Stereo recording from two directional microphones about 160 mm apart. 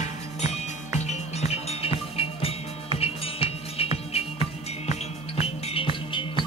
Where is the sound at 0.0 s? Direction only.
40° left (ahead or behind).